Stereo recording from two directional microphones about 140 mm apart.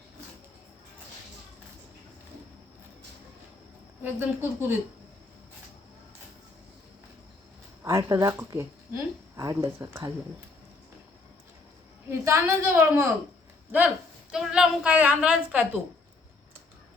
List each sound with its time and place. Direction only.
4.0 s a woman's voice: 15° right (ahead or behind)
7.9 s speech: 20° right (ahead or behind)
12.2 s a woman's voice: 20° right (ahead or behind)